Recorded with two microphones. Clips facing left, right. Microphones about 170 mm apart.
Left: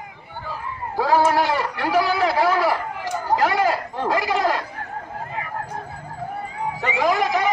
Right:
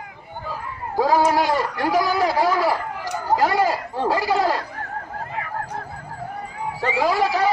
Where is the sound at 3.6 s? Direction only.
10° right (ahead or behind).